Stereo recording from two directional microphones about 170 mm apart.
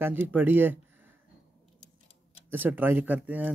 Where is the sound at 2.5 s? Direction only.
10° right (ahead or behind).